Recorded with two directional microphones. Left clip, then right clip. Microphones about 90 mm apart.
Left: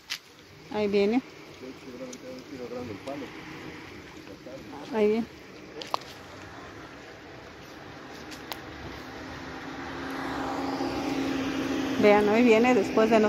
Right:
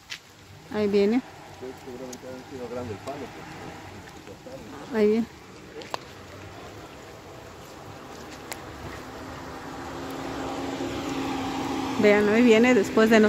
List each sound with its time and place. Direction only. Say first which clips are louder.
0.7 s speech: right 2 dB; 30° right (ahead or behind)
4.9 s speech: right 2 dB; 30° right (ahead or behind)
9.8 s vehicle: left 1 dB; 20° left (ahead or behind)
10.6 s vehicle: left 1 dB; 5° left (ahead or behind)
11.1 s a sound: even; 15° right (ahead or behind)
12.4 s speech: right 4 dB; 45° right (ahead or behind)
12.9 s speech: right 4 dB; 90° right